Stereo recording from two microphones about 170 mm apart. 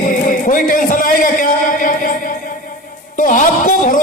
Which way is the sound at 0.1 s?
50° left (ahead or behind).